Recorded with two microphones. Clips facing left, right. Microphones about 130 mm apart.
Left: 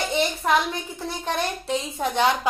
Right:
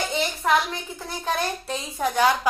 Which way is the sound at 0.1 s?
25° left (ahead or behind).